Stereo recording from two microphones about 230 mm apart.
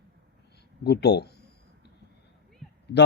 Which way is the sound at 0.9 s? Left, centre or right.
Left.